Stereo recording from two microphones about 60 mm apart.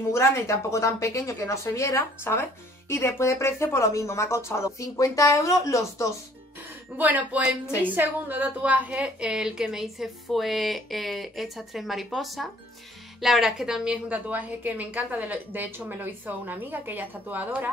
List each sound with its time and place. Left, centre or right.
0.1 s speech: left
2.0 s speech: left
7.0 s a woman's voice: right; by 13.9 s centre
14.0 s a woman's voice: right